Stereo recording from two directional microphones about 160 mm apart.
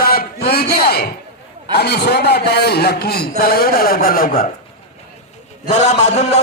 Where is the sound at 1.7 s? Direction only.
90° left; by 4.4 s 65° left (ahead or behind).